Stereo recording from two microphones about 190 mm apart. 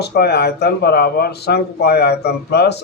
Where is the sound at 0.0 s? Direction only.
60° left (ahead or behind).